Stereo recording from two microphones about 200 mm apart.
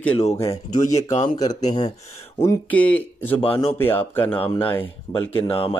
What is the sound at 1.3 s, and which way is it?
Speech, 20° left (ahead or behind).